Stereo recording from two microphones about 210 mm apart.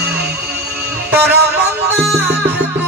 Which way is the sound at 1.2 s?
50° right (ahead or behind).